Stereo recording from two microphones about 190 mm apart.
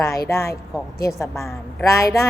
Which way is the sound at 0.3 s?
15° left (ahead or behind).